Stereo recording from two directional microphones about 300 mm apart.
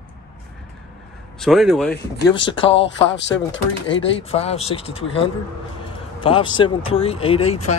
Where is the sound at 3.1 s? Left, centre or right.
Left.